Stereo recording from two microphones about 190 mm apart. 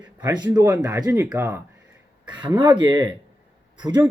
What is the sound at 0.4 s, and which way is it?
Speech, 15° right (ahead or behind).